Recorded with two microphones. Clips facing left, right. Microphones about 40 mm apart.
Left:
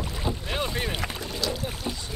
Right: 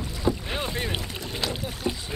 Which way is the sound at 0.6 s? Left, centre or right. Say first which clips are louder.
Left 1 dB; centre.